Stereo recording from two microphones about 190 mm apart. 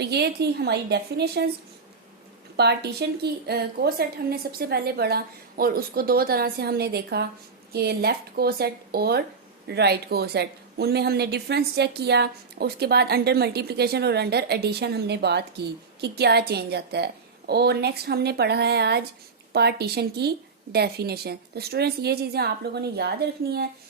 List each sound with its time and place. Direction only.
0.0 s a woman's voice: 60° right (ahead or behind)
2.6 s a woman's voice: 60° right (ahead or behind)